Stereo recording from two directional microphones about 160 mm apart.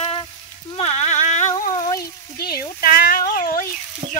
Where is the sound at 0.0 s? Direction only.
35° left (ahead or behind).